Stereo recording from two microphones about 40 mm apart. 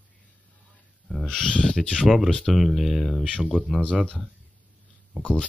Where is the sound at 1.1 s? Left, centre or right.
Centre.